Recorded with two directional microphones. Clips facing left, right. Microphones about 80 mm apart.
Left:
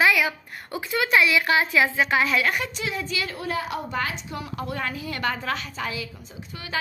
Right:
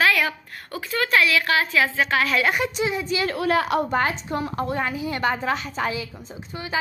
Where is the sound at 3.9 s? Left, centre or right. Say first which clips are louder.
Right 6 dB; right.